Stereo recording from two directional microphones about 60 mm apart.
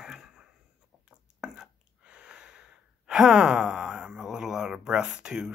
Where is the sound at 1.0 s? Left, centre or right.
Centre.